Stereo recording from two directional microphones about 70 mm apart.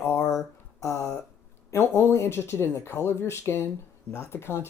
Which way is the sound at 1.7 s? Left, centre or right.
Left.